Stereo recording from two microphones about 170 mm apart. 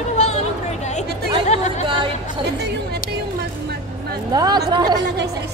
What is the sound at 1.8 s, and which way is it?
Speech, 30° right (ahead or behind).